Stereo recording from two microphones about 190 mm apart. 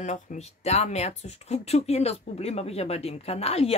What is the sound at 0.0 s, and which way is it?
Speech, 40° left (ahead or behind).